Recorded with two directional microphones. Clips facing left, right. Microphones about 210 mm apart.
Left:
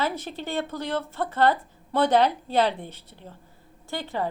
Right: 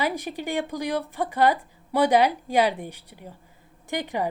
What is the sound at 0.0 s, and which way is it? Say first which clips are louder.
Speech: right 2 dB; 15° right (ahead or behind).